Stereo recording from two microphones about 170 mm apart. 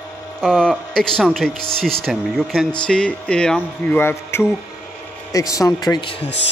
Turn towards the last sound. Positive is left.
turn(degrees=35)  # may be behind; listen again after turning